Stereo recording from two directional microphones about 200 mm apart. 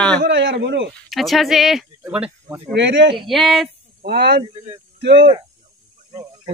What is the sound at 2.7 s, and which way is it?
Speech, 65° right (ahead or behind).